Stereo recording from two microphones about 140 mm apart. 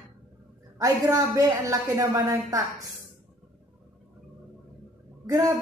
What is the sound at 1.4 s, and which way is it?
Speech, 25° right (ahead or behind).